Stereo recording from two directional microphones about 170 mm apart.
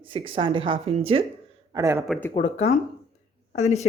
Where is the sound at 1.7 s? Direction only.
15° right (ahead or behind).